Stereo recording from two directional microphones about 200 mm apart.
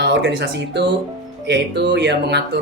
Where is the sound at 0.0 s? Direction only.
60° right (ahead or behind).